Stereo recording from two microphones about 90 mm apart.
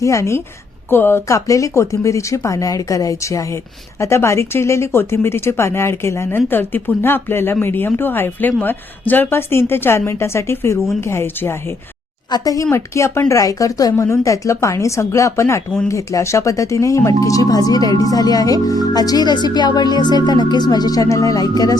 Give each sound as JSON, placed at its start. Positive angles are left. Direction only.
{"t": 0.0, "sound": "speech", "side_deg": 35}
{"t": 12.3, "sound": "speech", "side_deg": 45}
{"t": 12.7, "sound": "speech", "side_deg": 30}